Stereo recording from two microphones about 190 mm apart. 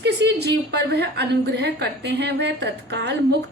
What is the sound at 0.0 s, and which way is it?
A woman's voice, 60° right (ahead or behind).